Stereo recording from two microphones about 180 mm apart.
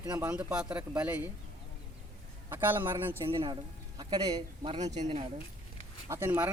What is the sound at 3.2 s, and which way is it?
Speech, 30° right (ahead or behind).